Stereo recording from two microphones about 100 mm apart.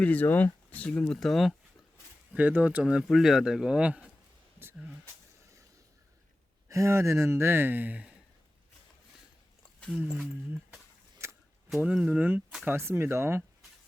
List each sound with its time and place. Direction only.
0.0 s speech: 15° left (ahead or behind)
2.3 s speech: 15° right (ahead or behind)
6.7 s speech: 30° right (ahead or behind); by 8.1 s 15° right (ahead or behind)
9.9 s speech: 5° right (ahead or behind)
11.2 s a sound: 30° right (ahead or behind)
11.9 s speech: 10° right (ahead or behind)